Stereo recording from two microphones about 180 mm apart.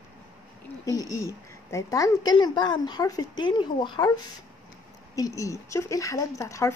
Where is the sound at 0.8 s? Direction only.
20° left (ahead or behind).